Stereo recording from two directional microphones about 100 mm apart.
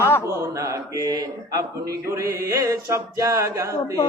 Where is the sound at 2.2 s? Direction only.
30° right (ahead or behind).